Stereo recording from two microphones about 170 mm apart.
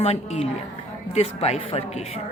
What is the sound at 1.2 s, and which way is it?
Speech, 35° left (ahead or behind).